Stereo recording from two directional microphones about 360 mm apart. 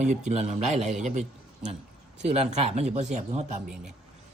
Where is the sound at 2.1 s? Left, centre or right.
Centre.